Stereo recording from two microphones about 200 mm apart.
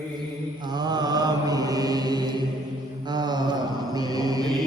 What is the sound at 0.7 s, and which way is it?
Mantra, 20° right (ahead or behind).